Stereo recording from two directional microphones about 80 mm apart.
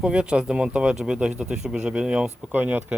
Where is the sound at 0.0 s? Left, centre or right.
Centre.